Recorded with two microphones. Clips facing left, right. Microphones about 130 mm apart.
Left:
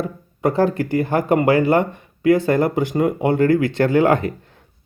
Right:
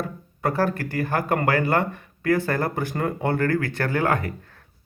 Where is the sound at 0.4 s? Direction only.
20° left (ahead or behind).